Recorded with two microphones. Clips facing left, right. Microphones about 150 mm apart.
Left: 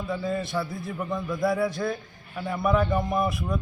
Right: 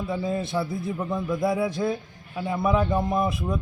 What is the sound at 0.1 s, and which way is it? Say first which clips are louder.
A man's voice: right 1 dB; 20° right (ahead or behind).